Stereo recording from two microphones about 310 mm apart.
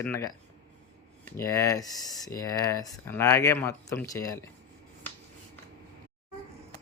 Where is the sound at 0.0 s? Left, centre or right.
Centre.